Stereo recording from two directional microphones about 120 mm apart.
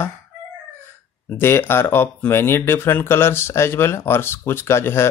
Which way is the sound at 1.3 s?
20° left (ahead or behind).